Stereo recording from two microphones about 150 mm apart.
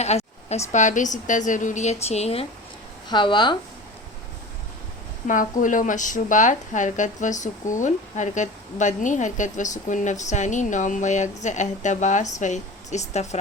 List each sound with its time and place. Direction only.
0.0 s a woman's voice: 45° left (ahead or behind)
3.1 s speech: 30° left (ahead or behind)
5.3 s a woman's voice: 60° left (ahead or behind)